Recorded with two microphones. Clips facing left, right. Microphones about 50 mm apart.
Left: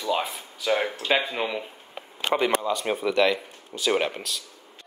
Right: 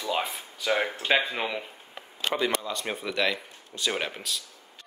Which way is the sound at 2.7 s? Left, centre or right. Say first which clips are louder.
Left 7 dB; centre.